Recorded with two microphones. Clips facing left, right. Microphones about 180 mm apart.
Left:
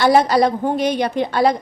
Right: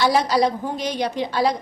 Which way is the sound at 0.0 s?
55° left (ahead or behind).